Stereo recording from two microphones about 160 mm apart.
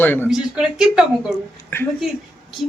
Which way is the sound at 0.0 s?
15° left (ahead or behind).